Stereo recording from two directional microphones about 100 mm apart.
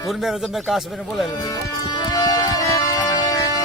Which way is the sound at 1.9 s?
45° left (ahead or behind).